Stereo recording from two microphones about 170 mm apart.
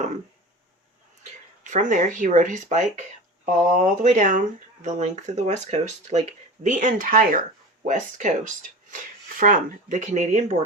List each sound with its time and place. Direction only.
1.7 s speech: 50° right (ahead or behind)